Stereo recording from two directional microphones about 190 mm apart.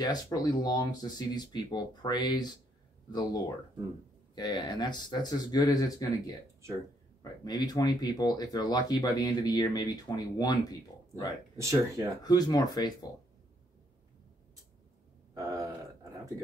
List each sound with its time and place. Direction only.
0.0 s speech: 20° left (ahead or behind)
7.4 s speech: 20° left (ahead or behind)
11.5 s speech: 15° right (ahead or behind)
12.2 s speech: 20° left (ahead or behind)
15.3 s a sound: 20° right (ahead or behind)